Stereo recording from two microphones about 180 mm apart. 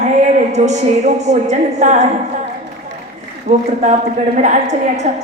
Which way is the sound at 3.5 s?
40° right (ahead or behind).